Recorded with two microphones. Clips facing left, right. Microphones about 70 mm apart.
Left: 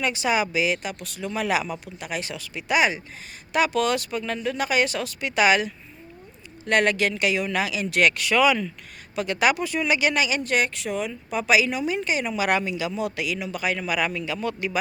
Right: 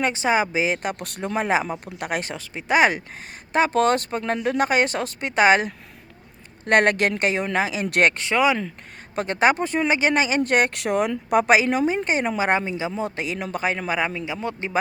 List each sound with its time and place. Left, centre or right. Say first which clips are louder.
0.0 s speech: right 3 dB; right
1.5 s speech: right 2 dB; right
1.8 s speech: right 4 dB; right
6.7 s speech: right 3 dB; right
7.9 s speech: right 1 dB; right
8.1 s speech: even; right
9.1 s speech: right 3 dB; right
11.5 s speech: right 3 dB; right
12.5 s speech: right 1 dB; right